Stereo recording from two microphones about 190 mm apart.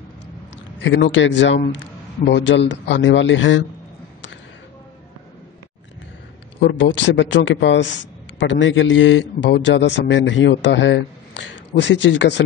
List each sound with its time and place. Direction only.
0.8 s a man's voice: 75° left (ahead or behind)
6.6 s a man's voice: 70° left (ahead or behind)